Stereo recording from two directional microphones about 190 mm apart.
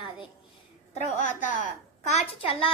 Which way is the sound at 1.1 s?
40° left (ahead or behind).